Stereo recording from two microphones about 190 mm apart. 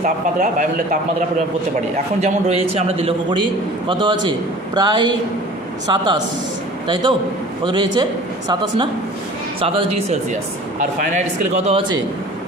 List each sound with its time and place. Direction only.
0.0 s speech: 45° right (ahead or behind)
2.2 s a man's voice: 35° right (ahead or behind)
9.6 s a man's voice: 30° right (ahead or behind)